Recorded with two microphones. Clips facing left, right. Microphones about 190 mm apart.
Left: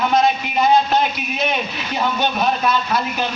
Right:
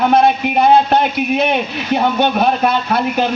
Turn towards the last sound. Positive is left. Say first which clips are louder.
# right 5 dB
turn(degrees=-60)  # may be behind; listen again after turning